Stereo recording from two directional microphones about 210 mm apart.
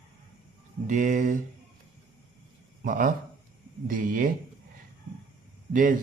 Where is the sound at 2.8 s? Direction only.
40° right (ahead or behind).